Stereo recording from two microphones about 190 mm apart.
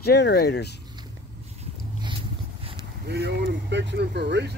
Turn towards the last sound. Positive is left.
turn(degrees=-60)  # may be behind; listen again after turning